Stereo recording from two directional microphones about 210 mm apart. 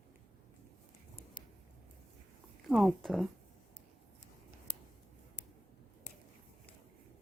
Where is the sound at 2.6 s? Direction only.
Centre (ahead or behind).